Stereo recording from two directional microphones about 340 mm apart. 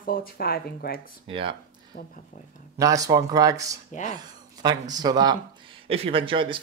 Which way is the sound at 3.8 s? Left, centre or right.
Left.